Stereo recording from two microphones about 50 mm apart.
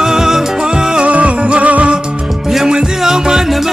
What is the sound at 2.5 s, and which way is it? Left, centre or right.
Music, centre.